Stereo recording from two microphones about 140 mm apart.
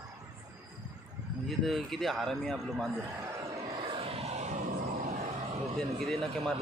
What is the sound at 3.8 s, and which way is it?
Vehicle, 40° right (ahead or behind).